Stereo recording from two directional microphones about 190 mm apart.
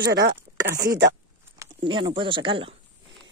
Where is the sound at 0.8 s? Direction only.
15° right (ahead or behind).